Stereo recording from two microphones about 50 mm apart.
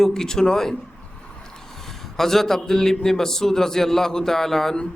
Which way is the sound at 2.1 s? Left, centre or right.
Centre.